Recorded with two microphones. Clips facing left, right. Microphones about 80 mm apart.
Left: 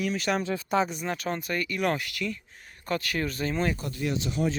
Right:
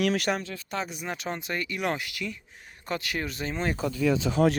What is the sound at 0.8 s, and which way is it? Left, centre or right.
Speech, centre.